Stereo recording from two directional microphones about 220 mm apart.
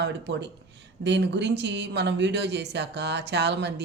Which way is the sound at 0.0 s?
50° right (ahead or behind).